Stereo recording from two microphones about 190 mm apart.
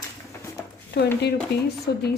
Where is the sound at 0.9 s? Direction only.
60° left (ahead or behind).